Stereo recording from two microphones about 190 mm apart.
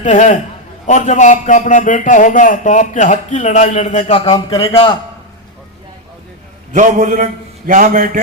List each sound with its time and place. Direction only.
0.0 s a man's voice: 40° left (ahead or behind)
6.7 s a man's voice: 40° right (ahead or behind)